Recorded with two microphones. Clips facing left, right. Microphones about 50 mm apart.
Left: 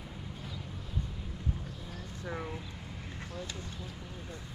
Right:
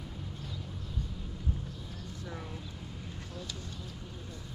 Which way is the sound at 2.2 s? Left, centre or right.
Left.